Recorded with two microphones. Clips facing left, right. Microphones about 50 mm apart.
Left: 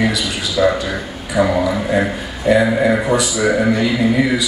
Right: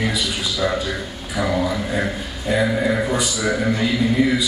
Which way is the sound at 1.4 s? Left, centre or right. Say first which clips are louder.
Left 7 dB; centre.